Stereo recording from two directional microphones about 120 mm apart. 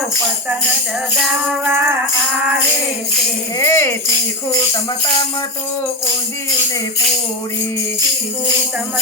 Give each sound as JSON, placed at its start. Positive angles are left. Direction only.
{"t": 1.6, "sound": "music", "side_deg": -15}
{"t": 3.6, "sound": "speech", "side_deg": 25}